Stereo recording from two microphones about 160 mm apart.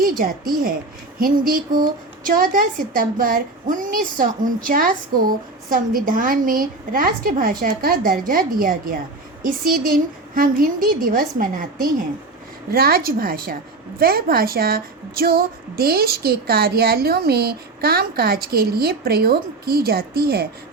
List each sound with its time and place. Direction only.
0.0 s a woman's voice: 60° right (ahead or behind); by 20.5 s 75° right (ahead or behind)